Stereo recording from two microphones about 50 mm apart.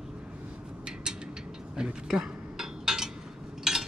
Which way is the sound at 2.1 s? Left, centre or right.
Centre.